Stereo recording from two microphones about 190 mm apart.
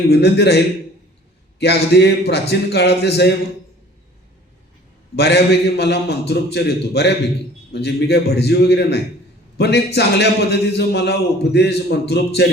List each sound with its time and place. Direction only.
0.1 s a man's voice: 60° left (ahead or behind)
5.1 s a man's voice: 60° left (ahead or behind)